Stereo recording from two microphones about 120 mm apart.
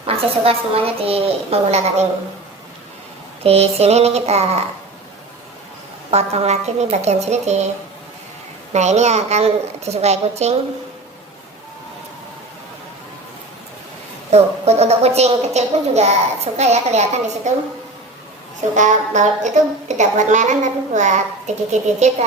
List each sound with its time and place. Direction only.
0.0 s a woman's voice: 50° right (ahead or behind)
3.4 s a woman's voice: 60° right (ahead or behind)
6.1 s a woman's voice: 60° right (ahead or behind)
8.7 s a woman's voice: 70° right (ahead or behind)
14.3 s a woman's voice: 65° right (ahead or behind)
18.8 s a woman's voice: 80° right